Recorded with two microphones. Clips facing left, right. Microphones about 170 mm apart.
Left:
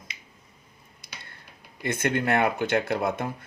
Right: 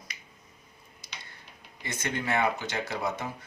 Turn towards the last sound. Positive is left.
turn(degrees=55)  # may be behind; listen again after turning